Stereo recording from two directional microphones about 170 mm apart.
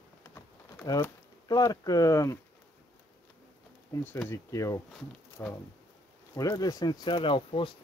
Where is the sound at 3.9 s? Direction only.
20° left (ahead or behind).